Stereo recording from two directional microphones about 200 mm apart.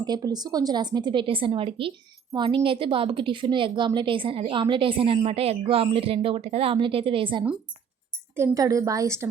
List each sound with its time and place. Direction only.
0.0 s a woman's voice: 20° right (ahead or behind)